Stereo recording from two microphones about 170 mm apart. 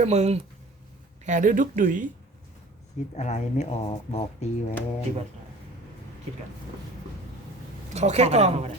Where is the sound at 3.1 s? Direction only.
40° left (ahead or behind).